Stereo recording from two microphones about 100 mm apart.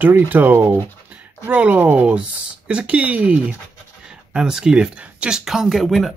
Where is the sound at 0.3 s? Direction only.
20° right (ahead or behind).